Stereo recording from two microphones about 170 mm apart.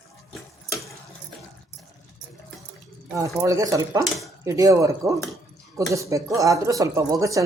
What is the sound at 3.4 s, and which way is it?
Speech, 20° right (ahead or behind).